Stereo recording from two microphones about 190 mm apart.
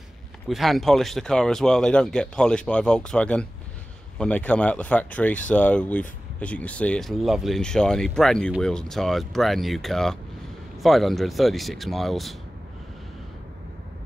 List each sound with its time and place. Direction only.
0.5 s speech: centre (ahead or behind)